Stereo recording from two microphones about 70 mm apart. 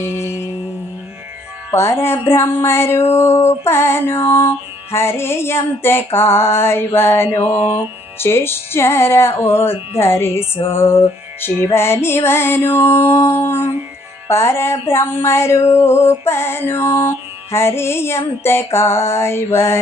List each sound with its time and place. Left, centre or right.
0.0 s music: left
1.7 s music: left